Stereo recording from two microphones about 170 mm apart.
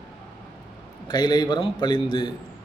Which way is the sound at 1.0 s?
25° left (ahead or behind).